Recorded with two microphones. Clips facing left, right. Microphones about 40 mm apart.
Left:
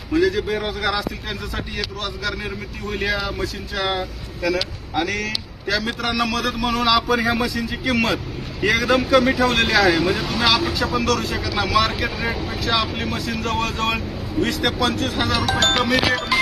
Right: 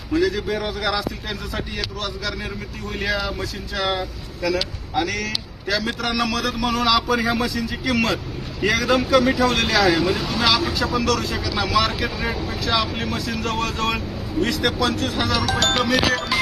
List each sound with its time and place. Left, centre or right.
0.1 s speech: centre
4.9 s speech: centre
5.7 s speech: centre
9.0 s speech: centre
14.7 s speech: left
14.9 s speech: centre